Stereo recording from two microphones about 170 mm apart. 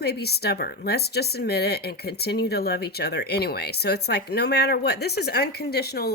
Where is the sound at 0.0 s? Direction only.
70° left (ahead or behind).